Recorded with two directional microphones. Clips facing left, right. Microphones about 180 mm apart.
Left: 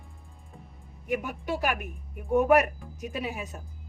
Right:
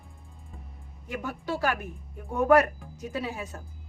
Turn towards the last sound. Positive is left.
turn(degrees=15)  # may be behind; listen again after turning